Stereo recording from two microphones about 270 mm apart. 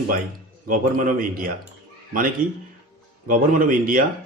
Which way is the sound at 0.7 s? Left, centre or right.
Right.